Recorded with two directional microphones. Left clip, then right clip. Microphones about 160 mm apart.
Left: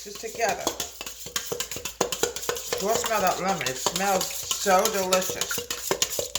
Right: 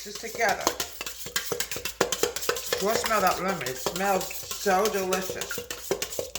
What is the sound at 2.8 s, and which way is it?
Stir, 20° left (ahead or behind).